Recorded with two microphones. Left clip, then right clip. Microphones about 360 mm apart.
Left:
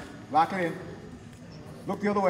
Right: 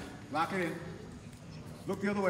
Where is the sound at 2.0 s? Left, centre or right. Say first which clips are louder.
Left 8 dB; left.